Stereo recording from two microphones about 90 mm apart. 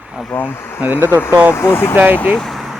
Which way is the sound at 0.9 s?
25° right (ahead or behind).